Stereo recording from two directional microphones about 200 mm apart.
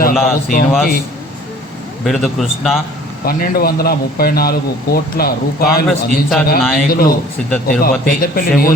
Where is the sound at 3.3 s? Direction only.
50° left (ahead or behind).